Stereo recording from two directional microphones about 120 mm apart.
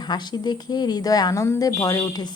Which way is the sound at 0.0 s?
35° left (ahead or behind).